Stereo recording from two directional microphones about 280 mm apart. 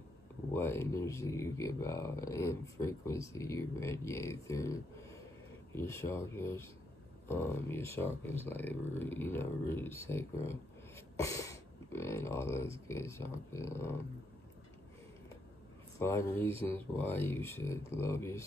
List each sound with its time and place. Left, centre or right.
0.5 s speech: centre
11.1 s a sound: centre
11.9 s speech: centre
16.0 s speech: centre